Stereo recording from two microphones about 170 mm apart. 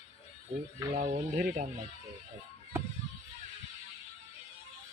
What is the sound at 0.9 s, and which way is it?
Speech, 50° right (ahead or behind).